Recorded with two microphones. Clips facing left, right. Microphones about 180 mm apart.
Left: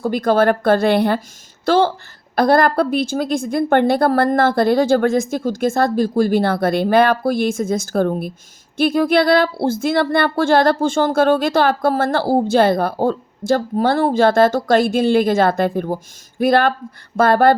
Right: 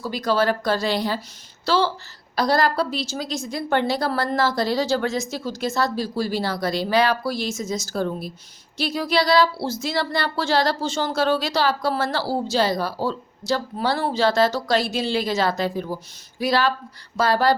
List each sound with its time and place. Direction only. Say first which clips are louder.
0.0 s a woman's voice: left 6 dB; 55° left (ahead or behind)